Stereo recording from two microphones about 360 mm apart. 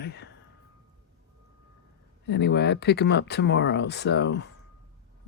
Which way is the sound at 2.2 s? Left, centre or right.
Left.